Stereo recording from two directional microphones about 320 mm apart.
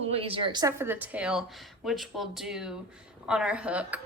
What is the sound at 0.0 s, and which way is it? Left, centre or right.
Speech, centre.